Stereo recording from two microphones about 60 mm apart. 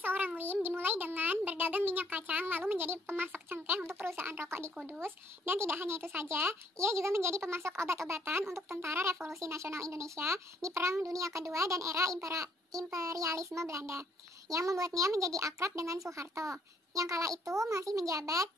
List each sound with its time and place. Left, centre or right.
0.0 s a sound: right
0.4 s a child's voice: right
14.5 s a child's voice: right